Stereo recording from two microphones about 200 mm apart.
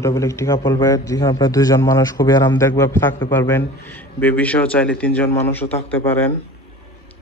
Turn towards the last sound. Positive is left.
turn(degrees=10)  # may be behind; listen again after turning